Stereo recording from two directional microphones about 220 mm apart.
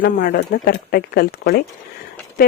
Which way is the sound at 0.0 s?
40° left (ahead or behind).